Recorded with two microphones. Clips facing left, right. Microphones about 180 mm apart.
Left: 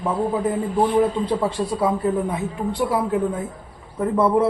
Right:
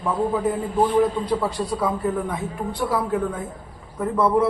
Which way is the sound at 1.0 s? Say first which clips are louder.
Left 1 dB; 25° left (ahead or behind).